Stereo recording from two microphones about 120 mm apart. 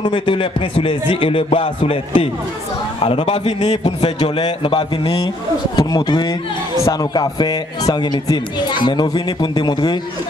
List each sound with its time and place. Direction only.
0.0 s a man's voice: 45° left (ahead or behind); by 3.9 s 65° left (ahead or behind)
4.5 s a man's voice: 50° left (ahead or behind)
5.8 s speech: 35° left (ahead or behind)